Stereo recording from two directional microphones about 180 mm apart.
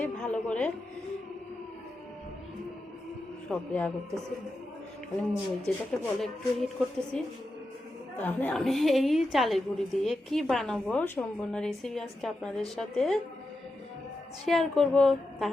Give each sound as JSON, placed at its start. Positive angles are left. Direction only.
{"t": 0.0, "sound": "a woman's voice", "side_deg": 5}
{"t": 3.5, "sound": "a man's voice", "side_deg": 5}
{"t": 5.7, "sound": "a man's voice", "side_deg": 5}
{"t": 14.4, "sound": "a woman's voice", "side_deg": 0}